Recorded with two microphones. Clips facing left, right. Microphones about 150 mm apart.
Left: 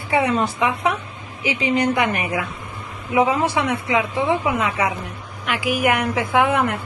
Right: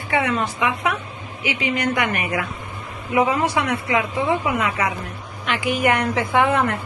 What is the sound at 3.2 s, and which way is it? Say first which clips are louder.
A woman's voice: left 1 dB; 5° left (ahead or behind).